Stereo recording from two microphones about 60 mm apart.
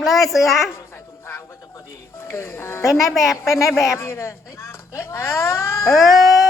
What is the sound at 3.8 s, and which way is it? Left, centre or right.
Speech, left.